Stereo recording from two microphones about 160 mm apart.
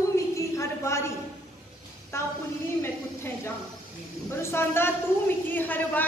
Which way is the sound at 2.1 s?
15° left (ahead or behind).